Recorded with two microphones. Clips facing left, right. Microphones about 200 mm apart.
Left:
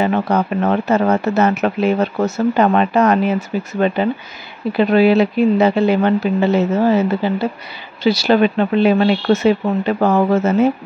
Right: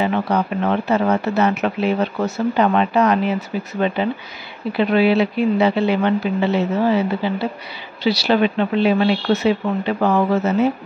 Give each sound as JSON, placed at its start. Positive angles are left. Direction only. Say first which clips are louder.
{"t": 0.0, "sound": "speech", "louder": "left 3 dB", "side_deg": 45}